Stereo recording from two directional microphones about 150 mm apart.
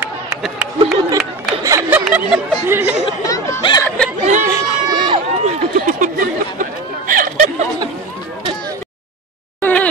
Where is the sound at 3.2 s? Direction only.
20° left (ahead or behind).